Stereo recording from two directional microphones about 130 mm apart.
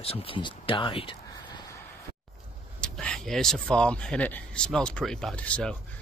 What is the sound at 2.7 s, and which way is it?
Speech, 5° left (ahead or behind).